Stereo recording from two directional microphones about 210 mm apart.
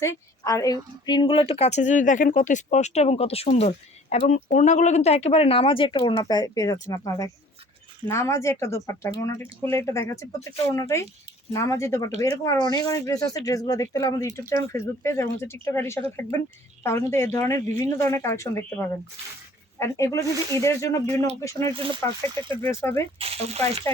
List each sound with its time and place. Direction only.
0.0 s a woman's voice: 15° left (ahead or behind)
21.7 s speech: 25° right (ahead or behind)
22.6 s speech: 10° left (ahead or behind)
23.1 s speech: 30° right (ahead or behind)